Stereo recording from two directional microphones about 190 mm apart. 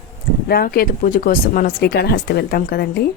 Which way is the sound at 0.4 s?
55° left (ahead or behind).